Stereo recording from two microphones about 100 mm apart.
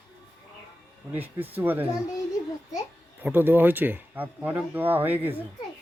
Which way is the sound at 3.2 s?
20° right (ahead or behind).